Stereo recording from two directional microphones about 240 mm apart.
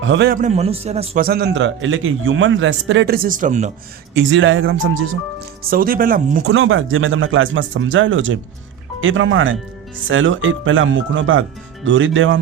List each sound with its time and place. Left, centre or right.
0.0 s a man's voice: right
1.2 s a man's voice: right
4.1 s a man's voice: right
5.7 s speech: right
6.5 s a man's voice: right